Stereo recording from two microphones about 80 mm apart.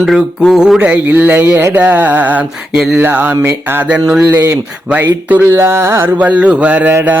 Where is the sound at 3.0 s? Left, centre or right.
Right.